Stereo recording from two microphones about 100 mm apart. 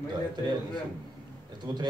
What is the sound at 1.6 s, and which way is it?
Speech, 45° right (ahead or behind).